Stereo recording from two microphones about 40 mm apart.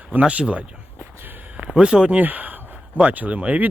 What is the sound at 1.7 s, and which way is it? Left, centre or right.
Speech, right.